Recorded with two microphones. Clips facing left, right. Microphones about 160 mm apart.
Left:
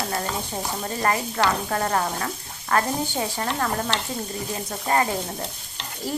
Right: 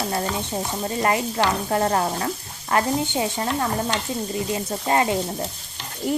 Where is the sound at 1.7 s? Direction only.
25° right (ahead or behind).